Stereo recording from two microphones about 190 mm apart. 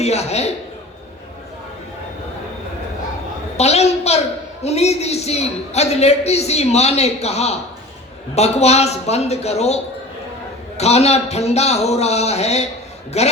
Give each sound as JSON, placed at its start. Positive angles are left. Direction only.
{"t": 0.0, "sound": "a woman's voice", "side_deg": 35}
{"t": 3.6, "sound": "a woman's voice", "side_deg": 35}